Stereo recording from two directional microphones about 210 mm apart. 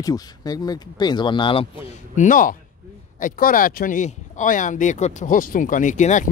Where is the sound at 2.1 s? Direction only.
40° left (ahead or behind).